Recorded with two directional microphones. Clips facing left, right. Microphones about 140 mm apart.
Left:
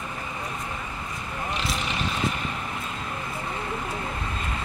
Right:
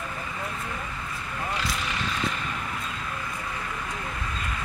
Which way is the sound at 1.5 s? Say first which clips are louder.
Left 2 dB; 20° left (ahead or behind).